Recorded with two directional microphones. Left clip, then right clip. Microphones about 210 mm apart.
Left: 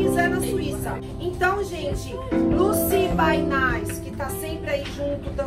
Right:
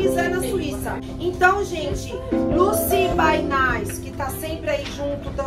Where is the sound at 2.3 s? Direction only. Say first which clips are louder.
Right 2 dB; centre (ahead or behind).